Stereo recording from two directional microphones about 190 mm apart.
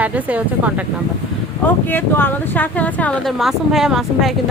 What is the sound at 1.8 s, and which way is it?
Speech, 10° left (ahead or behind).